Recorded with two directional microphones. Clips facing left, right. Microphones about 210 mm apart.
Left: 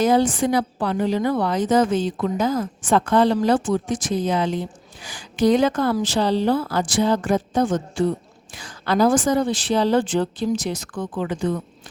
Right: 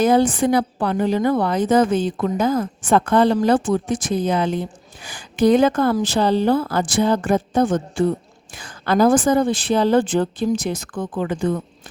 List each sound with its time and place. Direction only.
0.0 s a woman's voice: 55° right (ahead or behind)